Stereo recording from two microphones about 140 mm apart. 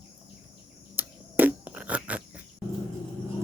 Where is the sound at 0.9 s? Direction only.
10° right (ahead or behind).